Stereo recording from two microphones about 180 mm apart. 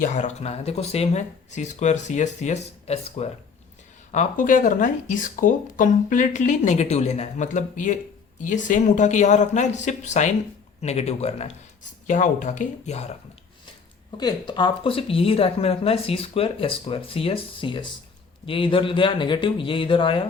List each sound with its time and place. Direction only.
0.0 s speech: 45° left (ahead or behind)
14.2 s speech: 25° left (ahead or behind)